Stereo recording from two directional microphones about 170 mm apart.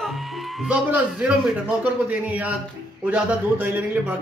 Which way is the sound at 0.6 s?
10° right (ahead or behind).